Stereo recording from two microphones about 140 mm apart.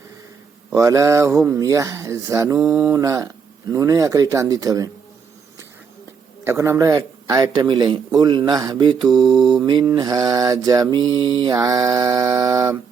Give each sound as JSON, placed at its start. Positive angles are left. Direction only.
{"t": 0.7, "sound": "mantra", "side_deg": -20}
{"t": 6.4, "sound": "mantra", "side_deg": -20}
{"t": 9.2, "sound": "mantra", "side_deg": 0}
{"t": 9.6, "sound": "mantra", "side_deg": -30}